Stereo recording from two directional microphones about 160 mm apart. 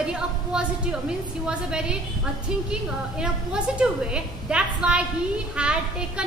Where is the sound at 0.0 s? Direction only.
5° right (ahead or behind).